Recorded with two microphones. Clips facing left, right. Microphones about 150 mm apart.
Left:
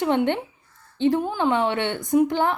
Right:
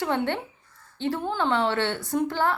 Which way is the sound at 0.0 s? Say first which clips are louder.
Left 5 dB; 20° left (ahead or behind).